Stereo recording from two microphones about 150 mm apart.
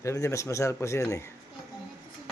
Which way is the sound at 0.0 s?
20° left (ahead or behind).